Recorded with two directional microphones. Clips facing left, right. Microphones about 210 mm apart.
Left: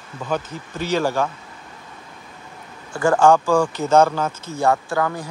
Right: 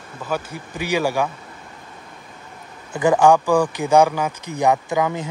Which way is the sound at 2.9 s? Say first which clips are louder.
Right 1 dB; 20° right (ahead or behind).